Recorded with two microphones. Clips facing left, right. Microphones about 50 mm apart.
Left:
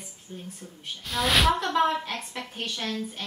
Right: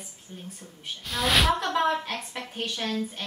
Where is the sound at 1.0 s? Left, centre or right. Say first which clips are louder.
Left 1 dB; centre.